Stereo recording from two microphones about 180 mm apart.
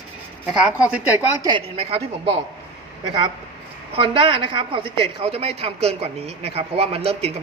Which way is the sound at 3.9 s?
30° right (ahead or behind).